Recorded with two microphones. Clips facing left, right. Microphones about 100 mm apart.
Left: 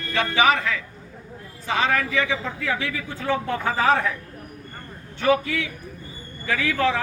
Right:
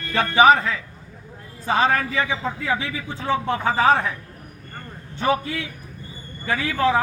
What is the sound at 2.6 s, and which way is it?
A man's voice, 25° right (ahead or behind).